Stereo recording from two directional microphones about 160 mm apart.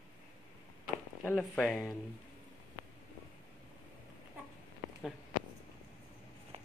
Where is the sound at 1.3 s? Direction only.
Centre (ahead or behind).